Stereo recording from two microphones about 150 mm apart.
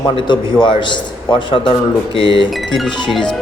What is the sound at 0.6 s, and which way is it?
A man's voice, 30° left (ahead or behind).